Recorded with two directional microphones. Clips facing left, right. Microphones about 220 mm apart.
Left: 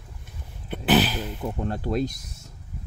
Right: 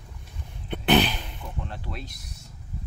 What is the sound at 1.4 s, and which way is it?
Speech, 45° left (ahead or behind).